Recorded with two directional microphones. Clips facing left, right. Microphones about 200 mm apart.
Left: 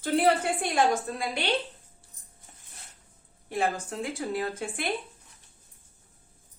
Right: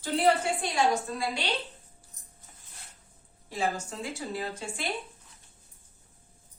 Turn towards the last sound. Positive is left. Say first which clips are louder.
# left 3 dB
turn(degrees=55)  # may be behind; listen again after turning